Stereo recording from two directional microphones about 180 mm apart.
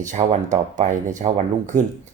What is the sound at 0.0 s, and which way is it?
Speech, 45° right (ahead or behind).